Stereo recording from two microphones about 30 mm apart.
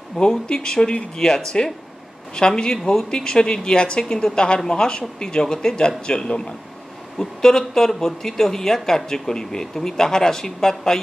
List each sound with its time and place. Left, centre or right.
0.5 s speech: left
4.0 s speech: centre
7.2 s speech: centre